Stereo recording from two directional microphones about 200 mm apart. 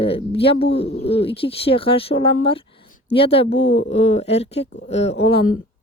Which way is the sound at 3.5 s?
65° left (ahead or behind).